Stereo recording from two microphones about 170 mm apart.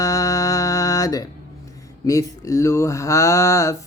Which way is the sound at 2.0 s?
20° left (ahead or behind).